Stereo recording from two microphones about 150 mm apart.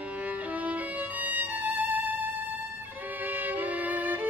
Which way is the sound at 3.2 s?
10° right (ahead or behind).